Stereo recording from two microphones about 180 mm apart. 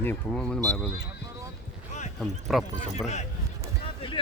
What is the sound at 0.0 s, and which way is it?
Speech, 10° left (ahead or behind).